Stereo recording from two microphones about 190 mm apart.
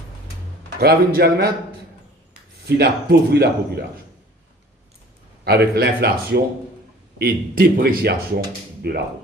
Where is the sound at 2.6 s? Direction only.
55° right (ahead or behind).